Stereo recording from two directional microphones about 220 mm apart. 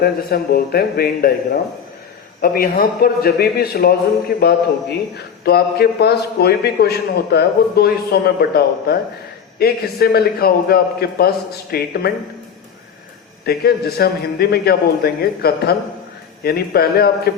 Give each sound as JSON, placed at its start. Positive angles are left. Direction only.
{"t": 0.0, "sound": "a man's voice", "side_deg": 45}
{"t": 13.4, "sound": "a man's voice", "side_deg": 45}